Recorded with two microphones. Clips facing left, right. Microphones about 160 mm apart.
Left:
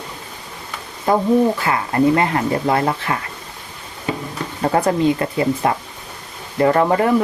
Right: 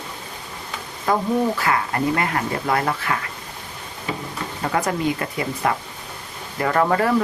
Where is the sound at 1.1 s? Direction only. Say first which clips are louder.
Left 5 dB; 25° left (ahead or behind).